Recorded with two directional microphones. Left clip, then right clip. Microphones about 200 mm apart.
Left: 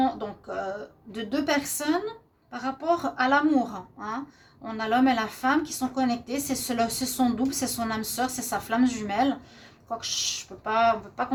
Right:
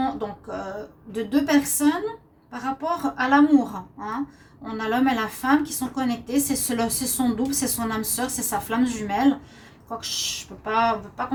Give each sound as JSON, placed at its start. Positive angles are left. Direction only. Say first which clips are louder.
{"t": 0.0, "sound": "a woman's voice", "louder": "even", "side_deg": 45}